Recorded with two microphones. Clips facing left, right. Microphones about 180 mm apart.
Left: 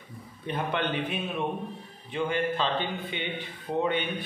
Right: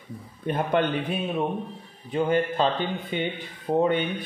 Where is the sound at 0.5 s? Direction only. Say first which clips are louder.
Right 6 dB; 45° right (ahead or behind).